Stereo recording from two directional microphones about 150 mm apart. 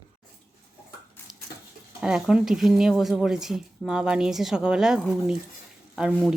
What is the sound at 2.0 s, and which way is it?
Speech, 5° right (ahead or behind).